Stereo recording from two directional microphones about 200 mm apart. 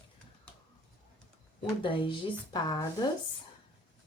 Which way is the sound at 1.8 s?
25° left (ahead or behind).